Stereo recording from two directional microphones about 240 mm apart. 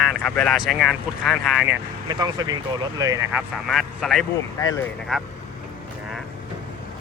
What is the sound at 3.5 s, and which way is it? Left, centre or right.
Speech, centre.